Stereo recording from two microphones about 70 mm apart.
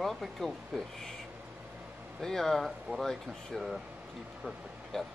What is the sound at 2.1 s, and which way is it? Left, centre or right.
Speech, centre.